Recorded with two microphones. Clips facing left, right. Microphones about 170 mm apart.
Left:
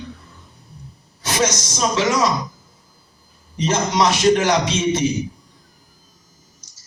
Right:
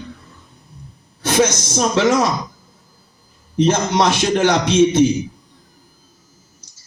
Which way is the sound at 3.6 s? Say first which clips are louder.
Right 3 dB; 55° right (ahead or behind).